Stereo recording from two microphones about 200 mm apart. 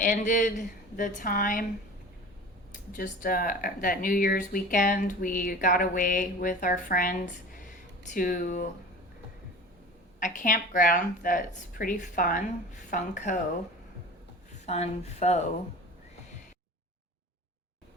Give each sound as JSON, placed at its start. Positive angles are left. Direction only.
{"t": 0.0, "sound": "a woman's voice", "side_deg": 40}
{"t": 2.9, "sound": "a woman's voice", "side_deg": 40}
{"t": 10.2, "sound": "a woman's voice", "side_deg": 40}
{"t": 14.7, "sound": "a woman's voice", "side_deg": 35}